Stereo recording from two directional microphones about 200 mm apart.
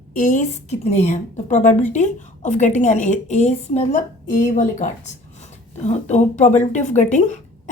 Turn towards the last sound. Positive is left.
turn(degrees=35)  # may be behind; listen again after turning